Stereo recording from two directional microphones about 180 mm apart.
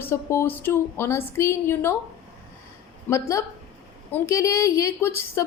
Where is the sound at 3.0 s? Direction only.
15° left (ahead or behind).